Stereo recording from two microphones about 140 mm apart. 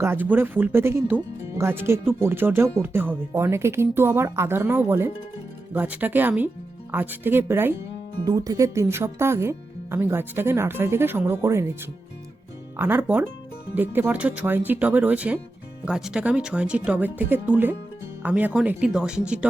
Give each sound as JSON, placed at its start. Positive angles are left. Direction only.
{"t": 0.0, "sound": "speech", "side_deg": -15}
{"t": 8.2, "sound": "speech", "side_deg": -25}